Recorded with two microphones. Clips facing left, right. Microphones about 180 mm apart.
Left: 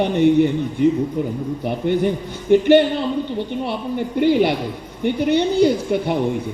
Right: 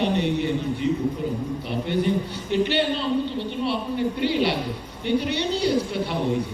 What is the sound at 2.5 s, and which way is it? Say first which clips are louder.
A woman's voice: left 10 dB; 50° left (ahead or behind).